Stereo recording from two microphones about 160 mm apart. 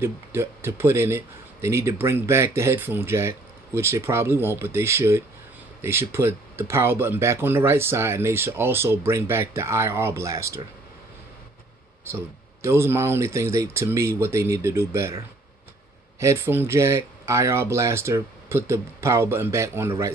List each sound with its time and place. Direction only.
0.0 s speech: 15° right (ahead or behind)
12.6 s speech: 15° right (ahead or behind)